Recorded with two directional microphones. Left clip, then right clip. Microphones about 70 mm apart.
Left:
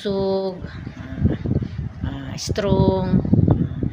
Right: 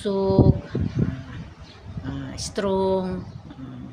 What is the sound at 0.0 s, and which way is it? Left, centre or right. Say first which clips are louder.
Speech: right 1 dB; centre.